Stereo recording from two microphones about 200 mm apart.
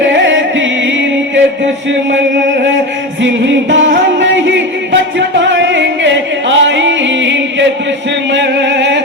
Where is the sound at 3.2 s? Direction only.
65° right (ahead or behind).